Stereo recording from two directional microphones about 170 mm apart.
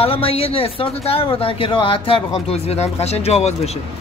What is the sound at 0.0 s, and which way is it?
Speech, 35° left (ahead or behind).